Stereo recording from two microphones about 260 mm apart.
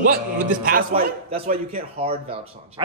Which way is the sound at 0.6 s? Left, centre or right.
Right.